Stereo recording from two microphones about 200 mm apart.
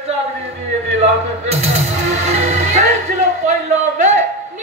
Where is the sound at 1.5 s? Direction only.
30° right (ahead or behind).